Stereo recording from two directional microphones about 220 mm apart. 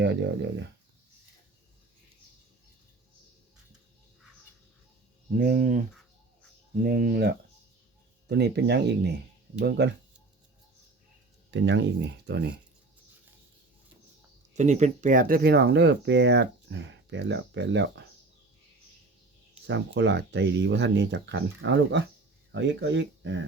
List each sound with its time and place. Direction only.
0.0 s speech: 50° right (ahead or behind)
5.4 s speech: 40° right (ahead or behind)
6.8 s speech: 40° right (ahead or behind)
11.5 s speech: 55° right (ahead or behind)
14.5 s speech: 30° right (ahead or behind); by 18.0 s 55° right (ahead or behind)
19.6 s speech: 55° right (ahead or behind)